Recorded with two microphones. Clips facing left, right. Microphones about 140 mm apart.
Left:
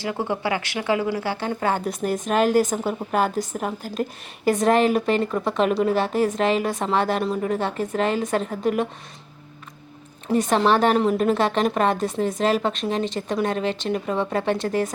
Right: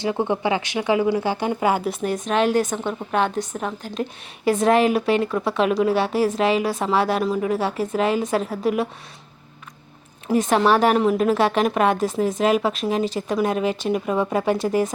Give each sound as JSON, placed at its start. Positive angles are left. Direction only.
{"t": 0.0, "sound": "a woman's voice", "side_deg": -20}
{"t": 10.2, "sound": "a woman's voice", "side_deg": -5}